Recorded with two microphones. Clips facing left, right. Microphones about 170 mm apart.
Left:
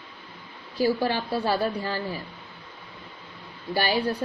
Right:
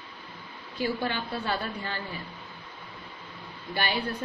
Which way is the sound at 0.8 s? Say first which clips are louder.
Left 6 dB; 35° left (ahead or behind).